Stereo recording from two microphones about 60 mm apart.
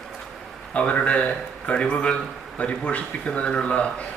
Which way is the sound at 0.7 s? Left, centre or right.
Centre.